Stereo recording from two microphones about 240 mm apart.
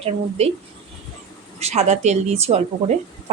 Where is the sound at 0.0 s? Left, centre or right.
Right.